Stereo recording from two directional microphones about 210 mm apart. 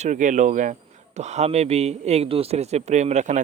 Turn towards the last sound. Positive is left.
turn(degrees=-35)  # may be behind; listen again after turning